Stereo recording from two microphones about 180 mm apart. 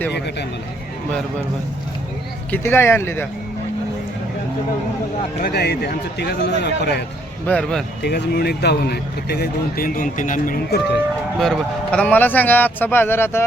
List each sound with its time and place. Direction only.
2.5 s speech: 15° left (ahead or behind)
5.4 s speech: 65° left (ahead or behind)
7.4 s speech: 5° left (ahead or behind)
8.0 s speech: 65° left (ahead or behind)
11.3 s speech: 5° left (ahead or behind)